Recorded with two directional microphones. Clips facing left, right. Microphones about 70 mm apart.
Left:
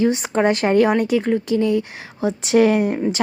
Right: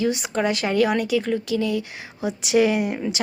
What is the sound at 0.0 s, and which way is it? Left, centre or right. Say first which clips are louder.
A woman's voice: left 5 dB; left.